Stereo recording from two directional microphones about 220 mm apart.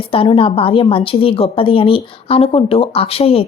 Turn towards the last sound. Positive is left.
turn(degrees=25)  # may be behind; listen again after turning